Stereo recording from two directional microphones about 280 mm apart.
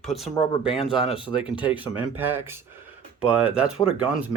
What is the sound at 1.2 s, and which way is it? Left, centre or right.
Speech, centre.